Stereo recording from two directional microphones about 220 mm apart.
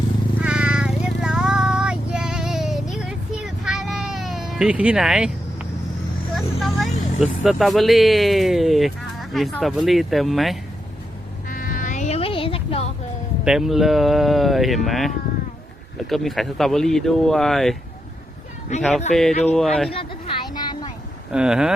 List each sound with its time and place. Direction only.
0.4 s cat: 5° right (ahead or behind)
6.6 s speech: centre (ahead or behind)
11.4 s music: 40° left (ahead or behind)
13.4 s speech: centre (ahead or behind)
18.8 s speech: centre (ahead or behind)
19.9 s a sound: 25° left (ahead or behind)
21.3 s speech: 5° right (ahead or behind)